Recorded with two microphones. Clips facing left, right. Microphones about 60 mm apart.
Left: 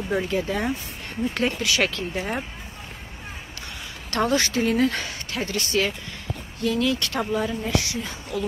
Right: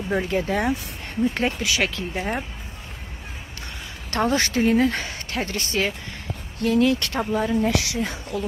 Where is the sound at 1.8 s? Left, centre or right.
Centre.